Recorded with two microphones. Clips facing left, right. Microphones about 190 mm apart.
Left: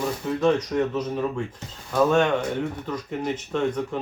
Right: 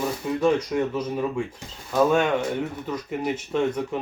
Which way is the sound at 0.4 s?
10° right (ahead or behind).